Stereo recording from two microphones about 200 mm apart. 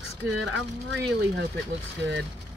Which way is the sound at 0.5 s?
55° right (ahead or behind).